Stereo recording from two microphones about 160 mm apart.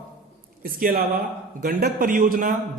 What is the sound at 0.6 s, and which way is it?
A man's voice, 65° right (ahead or behind).